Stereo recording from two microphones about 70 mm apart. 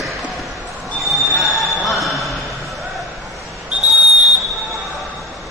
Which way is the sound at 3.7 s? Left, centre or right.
Right.